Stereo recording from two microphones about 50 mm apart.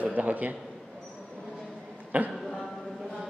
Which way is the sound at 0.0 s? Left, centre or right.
Right.